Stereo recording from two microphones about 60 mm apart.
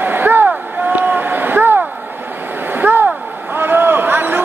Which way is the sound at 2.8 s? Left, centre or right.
Right.